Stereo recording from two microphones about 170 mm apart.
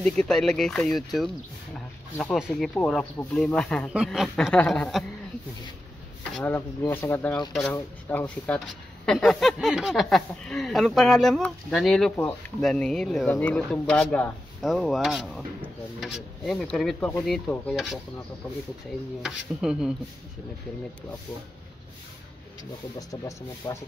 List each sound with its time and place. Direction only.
0.0 s speech: 5° left (ahead or behind)
6.3 s speech: 10° left (ahead or behind)
19.2 s speech: 5° right (ahead or behind)
22.9 s speech: 20° left (ahead or behind)